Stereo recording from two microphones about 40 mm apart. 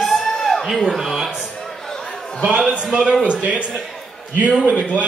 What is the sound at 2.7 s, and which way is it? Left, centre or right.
Speech, right.